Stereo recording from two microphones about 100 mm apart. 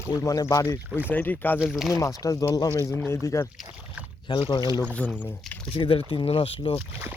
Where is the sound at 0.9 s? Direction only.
15° right (ahead or behind).